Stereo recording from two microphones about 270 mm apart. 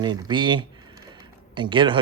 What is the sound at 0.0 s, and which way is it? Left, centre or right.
A man's voice, centre.